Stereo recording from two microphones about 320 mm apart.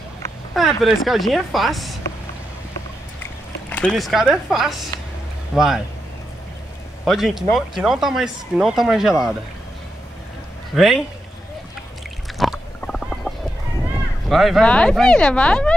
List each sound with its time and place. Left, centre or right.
0.6 s speech: centre
3.7 s speech: centre
7.1 s speech: centre
10.7 s speech: centre
12.4 s stomach rumble: centre
14.3 s speech: centre